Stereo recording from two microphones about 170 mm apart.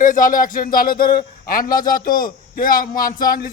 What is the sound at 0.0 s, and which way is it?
A man's voice, 50° left (ahead or behind).